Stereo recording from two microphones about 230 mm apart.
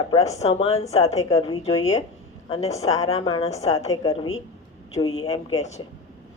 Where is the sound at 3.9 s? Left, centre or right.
Centre.